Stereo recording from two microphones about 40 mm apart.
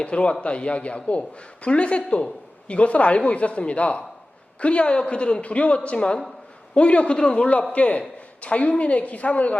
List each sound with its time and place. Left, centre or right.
0.0 s a woman's voice: left
7.3 s a man's voice: left